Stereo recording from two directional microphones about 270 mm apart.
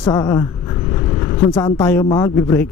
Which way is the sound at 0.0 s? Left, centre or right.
Centre.